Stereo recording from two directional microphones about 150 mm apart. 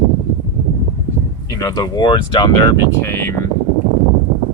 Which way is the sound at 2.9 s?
15° left (ahead or behind).